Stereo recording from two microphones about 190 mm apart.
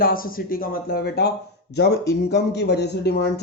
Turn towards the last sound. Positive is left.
turn(degrees=60)  # may be behind; listen again after turning